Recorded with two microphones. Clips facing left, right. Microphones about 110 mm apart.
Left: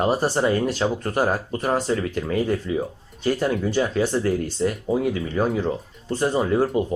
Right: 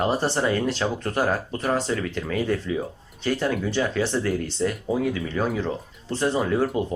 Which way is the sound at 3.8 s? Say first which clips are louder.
Left 3 dB; 10° left (ahead or behind).